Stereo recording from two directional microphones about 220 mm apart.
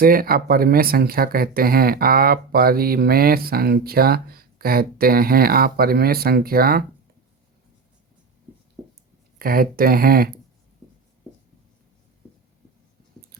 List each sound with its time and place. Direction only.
0.0 s speech: 40° right (ahead or behind)
8.8 s a sound: 5° right (ahead or behind)
9.4 s speech: 40° right (ahead or behind)